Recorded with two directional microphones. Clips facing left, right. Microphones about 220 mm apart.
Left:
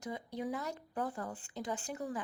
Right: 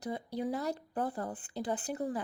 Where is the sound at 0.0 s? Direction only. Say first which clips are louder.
Right 4 dB; 35° right (ahead or behind).